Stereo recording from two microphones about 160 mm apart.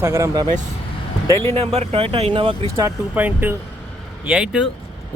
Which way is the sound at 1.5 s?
40° right (ahead or behind).